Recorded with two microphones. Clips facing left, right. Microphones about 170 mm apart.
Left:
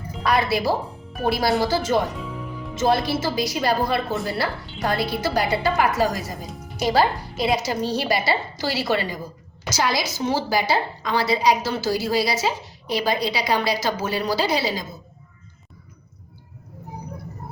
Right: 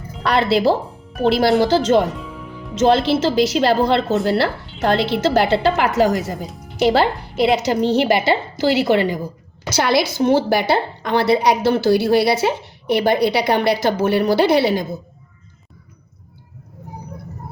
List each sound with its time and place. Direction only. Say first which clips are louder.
0.2 s a woman's voice: right 5 dB; 65° right (ahead or behind)